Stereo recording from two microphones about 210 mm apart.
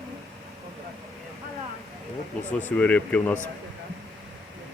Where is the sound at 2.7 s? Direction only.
5° left (ahead or behind).